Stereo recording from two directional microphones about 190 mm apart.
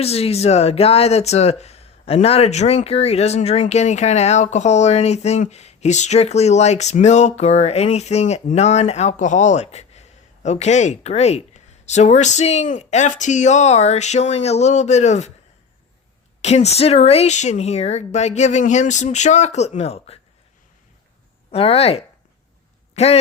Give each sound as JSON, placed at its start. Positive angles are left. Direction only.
{"t": 0.0, "sound": "speech", "side_deg": 30}
{"t": 16.4, "sound": "speech", "side_deg": 35}
{"t": 21.5, "sound": "speech", "side_deg": 30}